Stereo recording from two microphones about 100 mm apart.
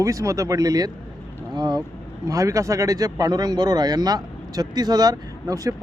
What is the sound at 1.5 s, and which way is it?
Vehicle, 45° right (ahead or behind).